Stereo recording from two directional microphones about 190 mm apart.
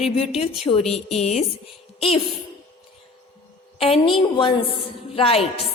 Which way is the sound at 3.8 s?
30° left (ahead or behind).